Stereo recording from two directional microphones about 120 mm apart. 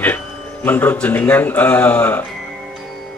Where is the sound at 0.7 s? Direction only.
15° left (ahead or behind).